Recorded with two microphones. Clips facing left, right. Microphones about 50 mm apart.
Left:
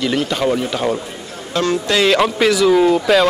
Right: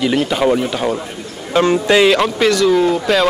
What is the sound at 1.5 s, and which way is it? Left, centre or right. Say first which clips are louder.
Speech: right 5 dB; right.